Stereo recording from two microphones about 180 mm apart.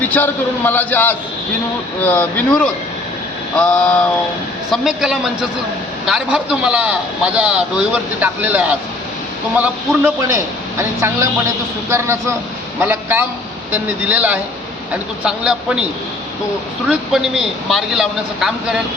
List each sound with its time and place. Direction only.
0.0 s a man's voice: 10° left (ahead or behind); by 15.9 s 5° right (ahead or behind)
16.9 s a man's voice: centre (ahead or behind)